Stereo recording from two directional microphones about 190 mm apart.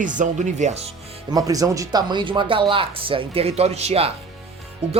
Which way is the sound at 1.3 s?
20° right (ahead or behind).